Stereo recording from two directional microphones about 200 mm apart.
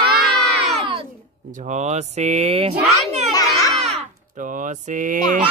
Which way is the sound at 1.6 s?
35° right (ahead or behind).